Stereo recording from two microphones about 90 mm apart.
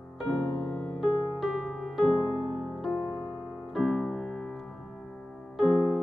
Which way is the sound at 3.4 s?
15° right (ahead or behind).